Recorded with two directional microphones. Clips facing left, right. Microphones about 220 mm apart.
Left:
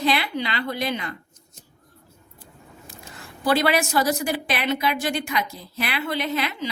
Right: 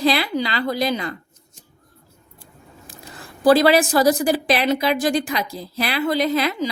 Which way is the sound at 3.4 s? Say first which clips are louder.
Right 7 dB; 35° right (ahead or behind).